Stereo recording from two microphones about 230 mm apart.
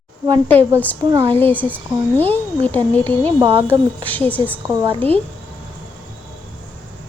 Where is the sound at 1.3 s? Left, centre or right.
Centre.